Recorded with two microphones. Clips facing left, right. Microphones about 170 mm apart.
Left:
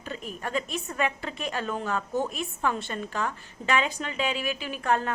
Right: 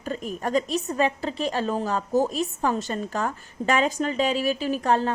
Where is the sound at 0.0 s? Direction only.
40° right (ahead or behind).